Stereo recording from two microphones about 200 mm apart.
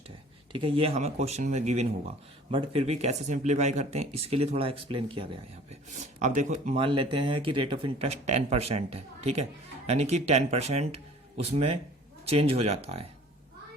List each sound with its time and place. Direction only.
0.5 s speech: 25° right (ahead or behind)
6.1 s speech: 35° right (ahead or behind)